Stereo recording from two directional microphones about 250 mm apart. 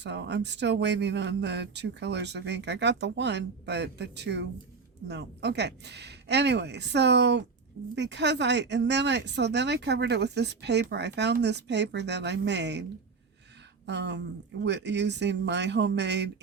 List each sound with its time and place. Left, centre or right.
0.0 s speech: right
13.8 s speech: right